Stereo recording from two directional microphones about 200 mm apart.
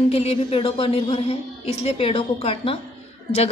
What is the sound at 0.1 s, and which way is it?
Speech, 30° left (ahead or behind).